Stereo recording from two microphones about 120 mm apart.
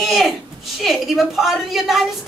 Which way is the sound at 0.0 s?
Centre (ahead or behind).